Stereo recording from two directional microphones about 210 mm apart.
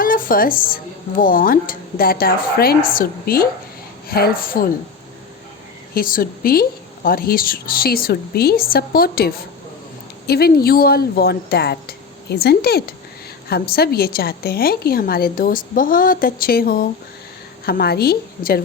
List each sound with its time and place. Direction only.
0.0 s a woman's voice: 40° left (ahead or behind)
5.9 s a woman's voice: 40° left (ahead or behind)